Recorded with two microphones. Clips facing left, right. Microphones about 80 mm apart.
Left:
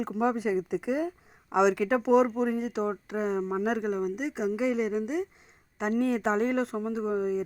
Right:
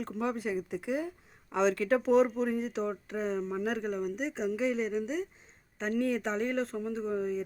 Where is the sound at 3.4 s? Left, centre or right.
Left.